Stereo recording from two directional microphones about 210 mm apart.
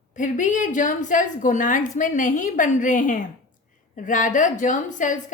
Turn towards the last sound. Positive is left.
turn(degrees=35)  # may be behind; listen again after turning